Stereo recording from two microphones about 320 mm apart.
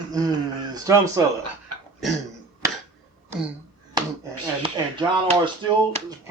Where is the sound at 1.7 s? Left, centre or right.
Right.